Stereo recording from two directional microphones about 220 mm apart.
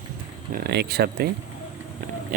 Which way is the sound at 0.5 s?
45° right (ahead or behind).